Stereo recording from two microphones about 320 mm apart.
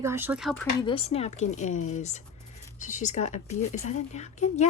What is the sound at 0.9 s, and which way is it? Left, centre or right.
Speech, centre.